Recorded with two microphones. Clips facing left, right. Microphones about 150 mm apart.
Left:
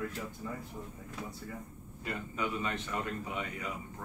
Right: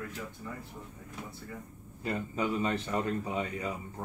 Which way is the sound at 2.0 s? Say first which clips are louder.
Right 4 dB; 30° right (ahead or behind).